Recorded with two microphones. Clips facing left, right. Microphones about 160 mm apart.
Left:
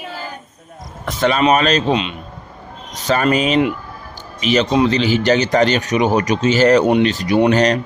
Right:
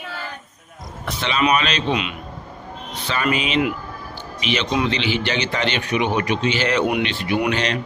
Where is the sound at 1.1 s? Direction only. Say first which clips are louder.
Left 6 dB; 45° left (ahead or behind); by 2.2 s 30° left (ahead or behind).